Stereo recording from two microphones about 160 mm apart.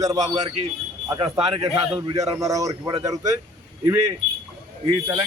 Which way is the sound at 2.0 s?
25° right (ahead or behind).